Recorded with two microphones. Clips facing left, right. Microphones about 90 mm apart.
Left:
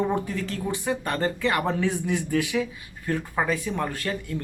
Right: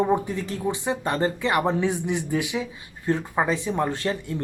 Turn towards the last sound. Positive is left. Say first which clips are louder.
# right 3 dB
turn(degrees=-25)  # may be behind; listen again after turning